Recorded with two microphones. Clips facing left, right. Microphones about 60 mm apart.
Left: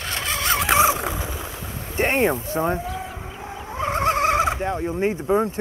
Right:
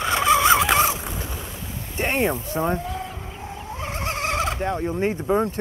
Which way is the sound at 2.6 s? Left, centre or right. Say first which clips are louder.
Left 1 dB; centre.